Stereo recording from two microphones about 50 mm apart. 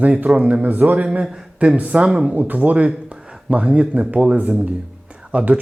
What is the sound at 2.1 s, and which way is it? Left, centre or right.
Speech, centre.